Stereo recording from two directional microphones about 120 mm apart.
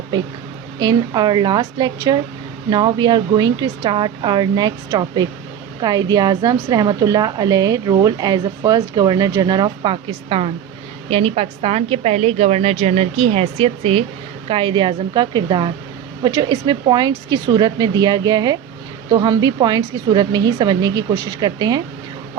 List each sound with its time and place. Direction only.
0.8 s a woman's voice: 35° right (ahead or behind)